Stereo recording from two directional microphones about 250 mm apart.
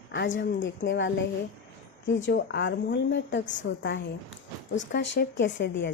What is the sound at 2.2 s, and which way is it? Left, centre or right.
A woman's voice, left.